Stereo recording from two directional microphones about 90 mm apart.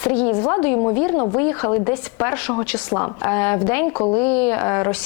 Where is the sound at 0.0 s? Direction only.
20° left (ahead or behind).